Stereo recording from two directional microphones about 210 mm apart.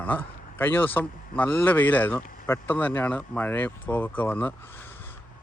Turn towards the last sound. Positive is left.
turn(degrees=10)  # may be behind; listen again after turning